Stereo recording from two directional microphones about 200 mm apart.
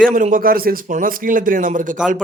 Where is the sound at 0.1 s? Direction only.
40° right (ahead or behind).